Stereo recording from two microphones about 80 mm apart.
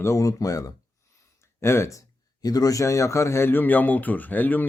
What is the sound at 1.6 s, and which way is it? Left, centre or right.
Speech, left.